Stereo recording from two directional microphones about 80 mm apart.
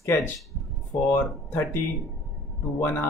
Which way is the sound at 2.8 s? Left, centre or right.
Left.